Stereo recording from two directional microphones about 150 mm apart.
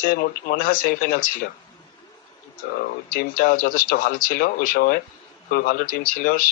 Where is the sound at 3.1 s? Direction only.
75° left (ahead or behind).